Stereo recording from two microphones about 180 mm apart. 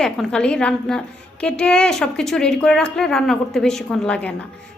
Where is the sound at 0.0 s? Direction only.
5° left (ahead or behind).